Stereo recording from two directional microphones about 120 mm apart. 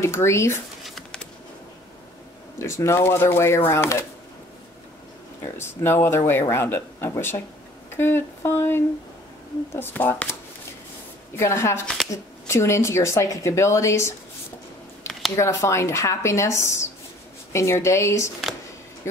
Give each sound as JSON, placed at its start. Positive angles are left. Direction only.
{"t": 0.0, "sound": "speech", "side_deg": 20}
{"t": 0.8, "sound": "bird", "side_deg": 5}
{"t": 2.6, "sound": "speech", "side_deg": 20}
{"t": 5.4, "sound": "speech", "side_deg": 20}
{"t": 11.3, "sound": "speech", "side_deg": 25}
{"t": 15.3, "sound": "speech", "side_deg": 25}